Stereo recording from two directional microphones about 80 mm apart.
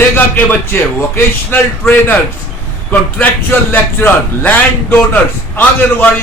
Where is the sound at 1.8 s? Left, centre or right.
Centre.